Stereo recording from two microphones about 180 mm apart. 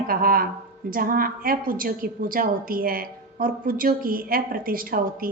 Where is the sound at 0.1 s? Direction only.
55° right (ahead or behind).